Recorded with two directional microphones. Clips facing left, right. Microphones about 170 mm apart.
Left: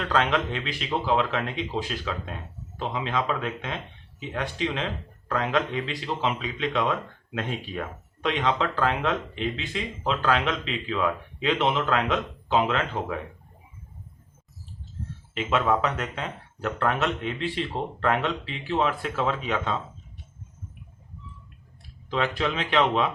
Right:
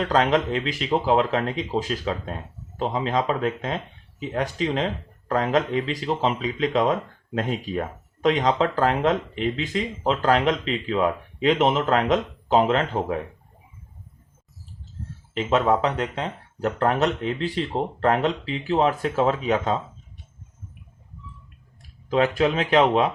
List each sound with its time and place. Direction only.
0.0 s speech: 40° right (ahead or behind)
15.4 s speech: 35° right (ahead or behind)
22.1 s speech: 40° right (ahead or behind)